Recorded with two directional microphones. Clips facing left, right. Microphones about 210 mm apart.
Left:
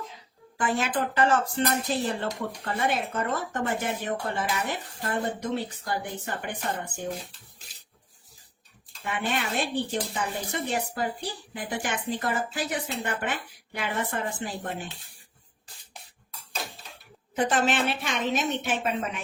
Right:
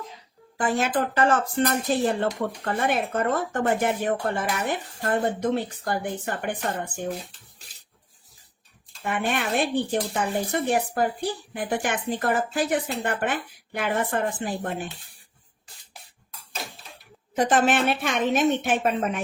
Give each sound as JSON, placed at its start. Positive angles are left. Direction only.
{"t": 0.5, "sound": "a woman's voice", "side_deg": -45}
{"t": 9.0, "sound": "a woman's voice", "side_deg": -55}
{"t": 17.3, "sound": "a woman's voice", "side_deg": -50}